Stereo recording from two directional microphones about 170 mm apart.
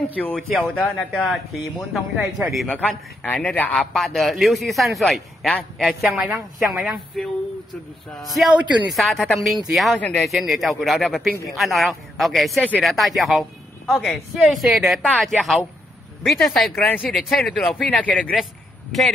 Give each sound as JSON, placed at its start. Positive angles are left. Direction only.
{"t": 0.2, "sound": "a man's voice", "side_deg": 5}
{"t": 8.4, "sound": "a man's voice", "side_deg": 0}